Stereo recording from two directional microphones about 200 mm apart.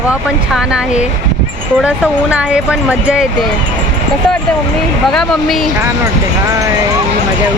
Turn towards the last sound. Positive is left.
turn(degrees=0)  # may be behind; listen again after turning